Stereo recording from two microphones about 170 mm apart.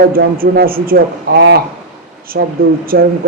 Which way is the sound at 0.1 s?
60° right (ahead or behind).